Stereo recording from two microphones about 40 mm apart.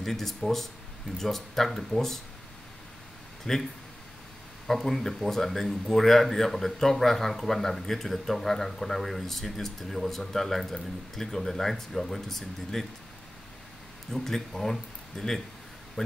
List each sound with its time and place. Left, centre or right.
0.0 s speech: centre
3.5 s speech: centre
4.6 s speech: centre
14.1 s speech: centre